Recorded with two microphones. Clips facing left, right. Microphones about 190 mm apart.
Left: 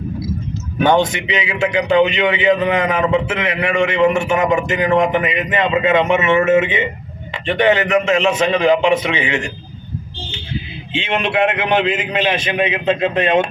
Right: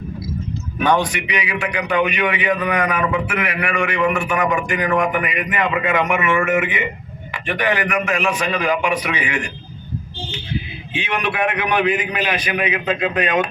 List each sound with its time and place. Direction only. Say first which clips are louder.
0.8 s a man's voice: left 4 dB; 25° left (ahead or behind)
10.9 s a man's voice: left 4 dB; 25° left (ahead or behind)